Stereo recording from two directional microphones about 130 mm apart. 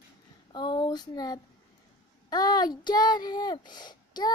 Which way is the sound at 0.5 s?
35° left (ahead or behind).